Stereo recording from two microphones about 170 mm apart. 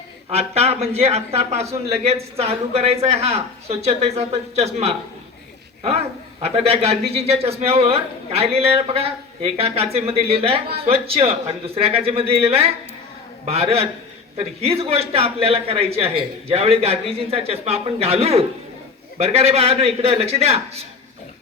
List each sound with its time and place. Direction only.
0.3 s a man's voice: 40° right (ahead or behind)
6.4 s a man's voice: 35° right (ahead or behind)